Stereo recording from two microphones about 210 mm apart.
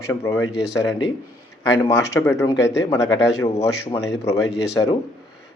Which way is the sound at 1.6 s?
15° left (ahead or behind).